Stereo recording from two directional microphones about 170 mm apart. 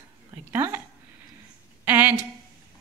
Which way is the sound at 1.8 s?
10° right (ahead or behind).